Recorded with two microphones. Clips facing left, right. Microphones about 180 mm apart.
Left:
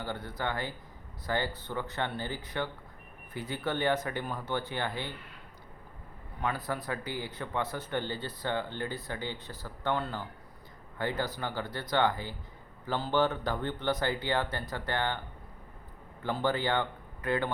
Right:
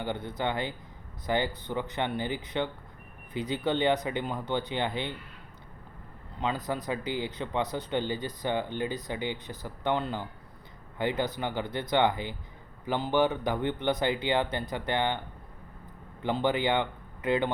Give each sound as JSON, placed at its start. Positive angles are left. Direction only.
{"t": 0.0, "sound": "speech", "side_deg": -20}
{"t": 6.4, "sound": "speech", "side_deg": -20}
{"t": 16.2, "sound": "speech", "side_deg": -20}